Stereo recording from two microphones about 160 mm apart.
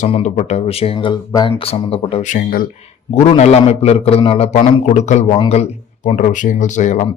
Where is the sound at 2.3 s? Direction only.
60° left (ahead or behind).